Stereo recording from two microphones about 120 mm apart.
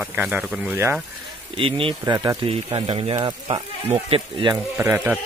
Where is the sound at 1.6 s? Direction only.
50° right (ahead or behind).